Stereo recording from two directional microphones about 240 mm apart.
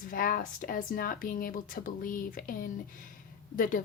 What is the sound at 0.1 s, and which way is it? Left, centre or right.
Speech, left.